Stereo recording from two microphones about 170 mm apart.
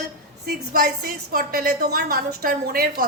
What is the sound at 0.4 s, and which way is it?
A woman's voice, 65° right (ahead or behind).